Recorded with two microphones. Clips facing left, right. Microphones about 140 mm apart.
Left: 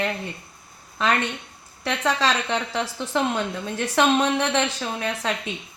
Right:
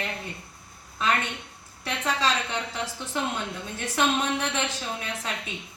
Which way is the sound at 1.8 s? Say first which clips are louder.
Left 4 dB; 80° left.